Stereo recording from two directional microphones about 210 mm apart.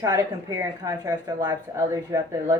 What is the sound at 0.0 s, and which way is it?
Speech, 15° right (ahead or behind).